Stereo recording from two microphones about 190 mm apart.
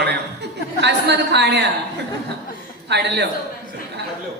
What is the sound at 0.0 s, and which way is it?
Chuckle, 60° right (ahead or behind).